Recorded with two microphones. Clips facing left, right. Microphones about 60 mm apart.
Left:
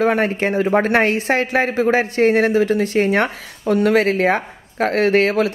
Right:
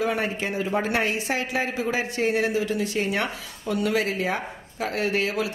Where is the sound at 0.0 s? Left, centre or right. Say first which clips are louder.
Left 8 dB; left.